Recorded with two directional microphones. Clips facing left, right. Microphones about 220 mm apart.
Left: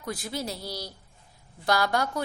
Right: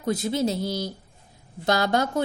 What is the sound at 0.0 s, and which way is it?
A woman's voice, 25° right (ahead or behind).